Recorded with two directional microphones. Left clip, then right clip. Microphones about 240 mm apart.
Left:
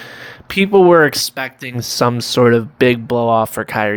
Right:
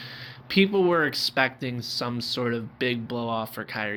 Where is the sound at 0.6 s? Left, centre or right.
Left.